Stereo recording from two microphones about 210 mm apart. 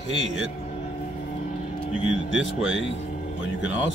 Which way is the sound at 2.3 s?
65° left (ahead or behind).